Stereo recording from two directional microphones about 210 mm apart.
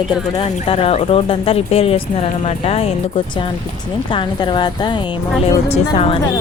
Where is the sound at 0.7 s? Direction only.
30° left (ahead or behind).